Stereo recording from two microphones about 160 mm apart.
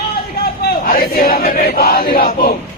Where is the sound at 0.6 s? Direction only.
65° left (ahead or behind).